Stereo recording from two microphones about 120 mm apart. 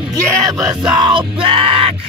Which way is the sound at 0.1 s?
30° right (ahead or behind).